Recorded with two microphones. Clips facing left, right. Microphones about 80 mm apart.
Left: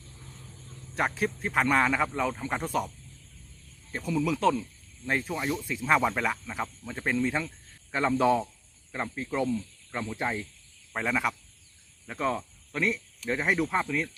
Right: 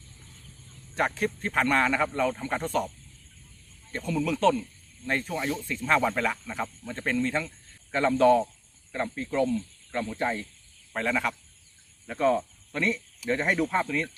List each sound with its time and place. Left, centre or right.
0.9 s speech: centre
3.9 s speech: centre
5.3 s speech: centre